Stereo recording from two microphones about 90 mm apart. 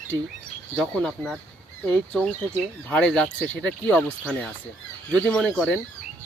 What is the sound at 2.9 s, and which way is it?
Speech, 10° left (ahead or behind).